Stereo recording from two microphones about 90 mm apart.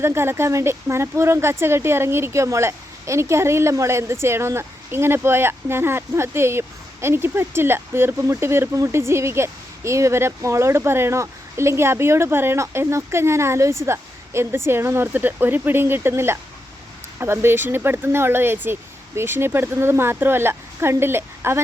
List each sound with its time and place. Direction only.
0.0 s speech: 25° right (ahead or behind)